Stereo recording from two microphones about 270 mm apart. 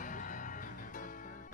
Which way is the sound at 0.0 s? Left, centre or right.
Left.